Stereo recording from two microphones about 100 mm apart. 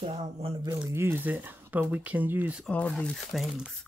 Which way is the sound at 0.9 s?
25° right (ahead or behind).